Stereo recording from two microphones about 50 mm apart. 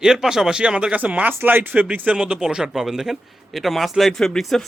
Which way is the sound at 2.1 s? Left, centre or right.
Centre.